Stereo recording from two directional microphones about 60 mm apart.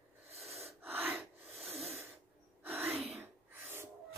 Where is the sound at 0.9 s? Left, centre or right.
Right.